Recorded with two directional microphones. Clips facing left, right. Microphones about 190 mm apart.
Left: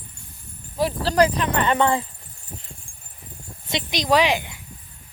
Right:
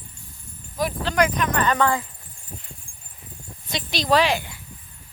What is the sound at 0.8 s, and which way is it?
Speech, 35° left (ahead or behind).